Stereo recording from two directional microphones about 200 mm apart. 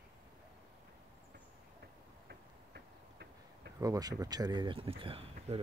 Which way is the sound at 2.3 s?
55° right (ahead or behind).